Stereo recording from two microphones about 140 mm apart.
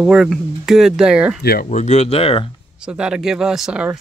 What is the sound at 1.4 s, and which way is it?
Speech, 85° left.